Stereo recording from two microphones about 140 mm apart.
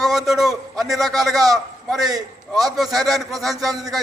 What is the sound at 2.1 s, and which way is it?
Speech, 25° right (ahead or behind).